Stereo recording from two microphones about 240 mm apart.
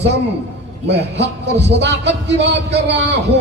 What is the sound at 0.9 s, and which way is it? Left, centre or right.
A man's voice, right.